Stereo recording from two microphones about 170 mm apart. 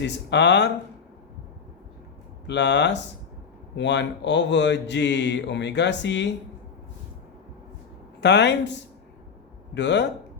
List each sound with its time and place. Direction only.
0.0 s speech: 90° left
2.5 s speech: 90° left
8.2 s speech: 90° left